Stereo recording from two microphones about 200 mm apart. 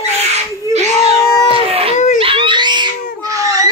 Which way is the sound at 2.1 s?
25° right (ahead or behind).